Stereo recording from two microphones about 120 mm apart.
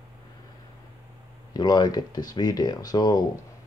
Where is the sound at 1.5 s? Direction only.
35° left (ahead or behind).